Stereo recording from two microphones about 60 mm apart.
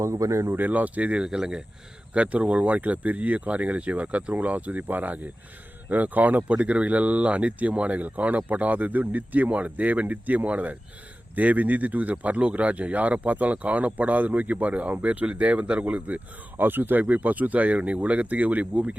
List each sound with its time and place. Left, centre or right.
0.0 s speech: right
0.5 s speech: right
1.2 s speech: centre